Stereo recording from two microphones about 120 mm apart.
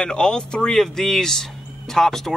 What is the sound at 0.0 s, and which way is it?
Speech, 5° left (ahead or behind).